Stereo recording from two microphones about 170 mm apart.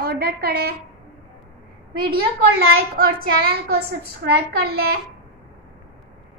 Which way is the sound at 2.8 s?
60° right (ahead or behind).